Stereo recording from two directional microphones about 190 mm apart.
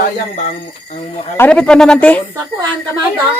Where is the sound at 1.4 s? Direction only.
5° left (ahead or behind).